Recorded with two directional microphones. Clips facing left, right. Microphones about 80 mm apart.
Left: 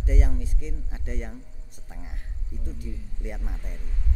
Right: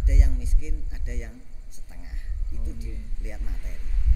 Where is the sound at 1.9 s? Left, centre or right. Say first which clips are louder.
Left 4 dB; left.